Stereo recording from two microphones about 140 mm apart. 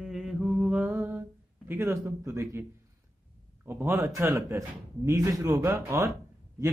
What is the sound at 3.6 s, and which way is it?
A man's voice, 15° right (ahead or behind).